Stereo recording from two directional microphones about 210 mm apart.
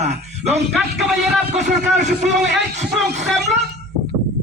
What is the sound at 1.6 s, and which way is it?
Speech, 35° right (ahead or behind).